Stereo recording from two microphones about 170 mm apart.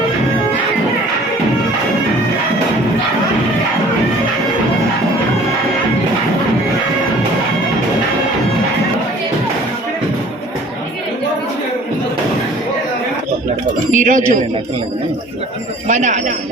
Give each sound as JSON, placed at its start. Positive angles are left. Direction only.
{"t": 13.9, "sound": "speech", "side_deg": -50}
{"t": 15.9, "sound": "speech", "side_deg": -45}